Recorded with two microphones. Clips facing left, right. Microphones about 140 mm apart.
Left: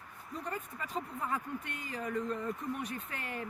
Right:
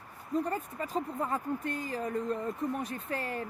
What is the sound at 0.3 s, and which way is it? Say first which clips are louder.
Speech: right 8 dB; 35° right (ahead or behind).